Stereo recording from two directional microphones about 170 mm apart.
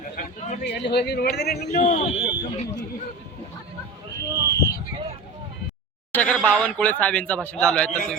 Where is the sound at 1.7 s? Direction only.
35° left (ahead or behind).